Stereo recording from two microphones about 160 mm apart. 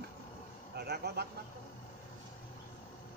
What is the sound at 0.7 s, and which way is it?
Vehicle, 90° right.